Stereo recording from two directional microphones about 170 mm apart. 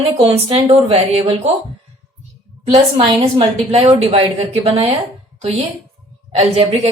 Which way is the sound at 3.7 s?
40° right (ahead or behind).